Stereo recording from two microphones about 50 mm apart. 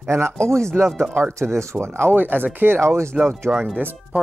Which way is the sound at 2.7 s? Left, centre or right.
Right.